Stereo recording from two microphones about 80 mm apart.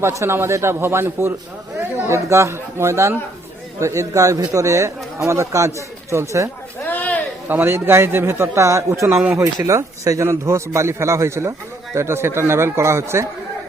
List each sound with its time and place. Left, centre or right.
0.0 s a man's voice: right
6.8 s a sound: left
7.4 s a man's voice: right